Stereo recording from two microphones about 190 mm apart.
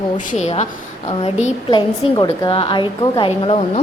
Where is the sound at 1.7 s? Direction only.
20° left (ahead or behind).